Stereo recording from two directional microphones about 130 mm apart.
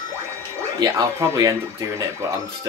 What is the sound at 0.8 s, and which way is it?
Speech, 25° right (ahead or behind).